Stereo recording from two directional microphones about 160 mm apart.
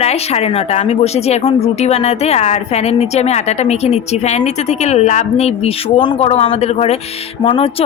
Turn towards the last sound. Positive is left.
turn(degrees=35)  # may be behind; listen again after turning